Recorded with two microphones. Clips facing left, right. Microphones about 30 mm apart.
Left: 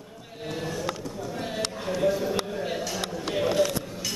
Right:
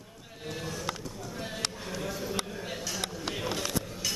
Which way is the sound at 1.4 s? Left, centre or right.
Left.